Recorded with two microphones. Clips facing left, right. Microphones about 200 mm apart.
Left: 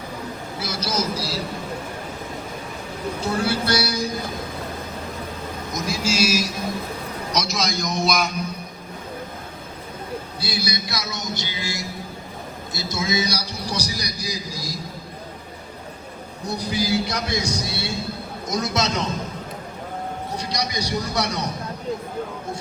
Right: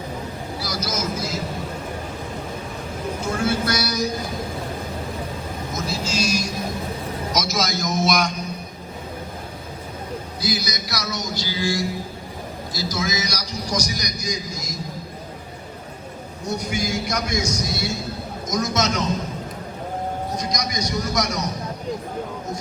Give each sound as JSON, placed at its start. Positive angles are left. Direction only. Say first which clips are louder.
{"t": 0.6, "sound": "vehicle", "louder": "left 2 dB", "side_deg": 25}
{"t": 3.4, "sound": "vehicle", "louder": "right 2 dB", "side_deg": 30}
{"t": 5.7, "sound": "vehicle", "louder": "left 2 dB", "side_deg": 15}
{"t": 7.3, "sound": "a man's voice", "louder": "even", "side_deg": 0}
{"t": 10.4, "sound": "music", "louder": "right 2 dB", "side_deg": 30}
{"t": 12.7, "sound": "a man's voice", "louder": "left 1 dB", "side_deg": 25}
{"t": 16.5, "sound": "a man's voice", "louder": "left 2 dB", "side_deg": 35}
{"t": 20.3, "sound": "a man's voice", "louder": "right 1 dB", "side_deg": 30}